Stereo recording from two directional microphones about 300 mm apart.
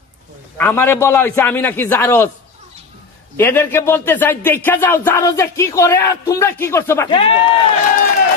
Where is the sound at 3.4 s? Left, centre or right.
Centre.